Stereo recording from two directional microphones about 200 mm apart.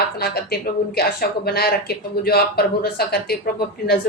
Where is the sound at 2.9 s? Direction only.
50° left (ahead or behind).